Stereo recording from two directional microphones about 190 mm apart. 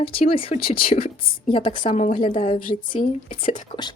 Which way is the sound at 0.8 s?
50° left (ahead or behind).